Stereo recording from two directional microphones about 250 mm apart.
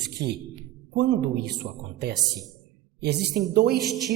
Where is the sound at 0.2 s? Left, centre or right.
Right.